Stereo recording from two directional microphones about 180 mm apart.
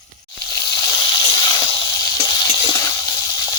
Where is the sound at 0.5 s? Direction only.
20° left (ahead or behind).